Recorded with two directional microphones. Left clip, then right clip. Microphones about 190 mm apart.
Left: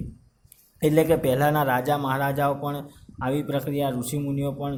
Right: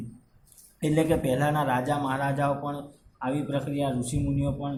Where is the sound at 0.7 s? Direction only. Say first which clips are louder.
Left 5 dB; 50° left (ahead or behind).